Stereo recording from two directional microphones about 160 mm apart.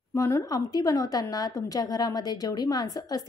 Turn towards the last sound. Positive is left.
turn(degrees=25)  # may be behind; listen again after turning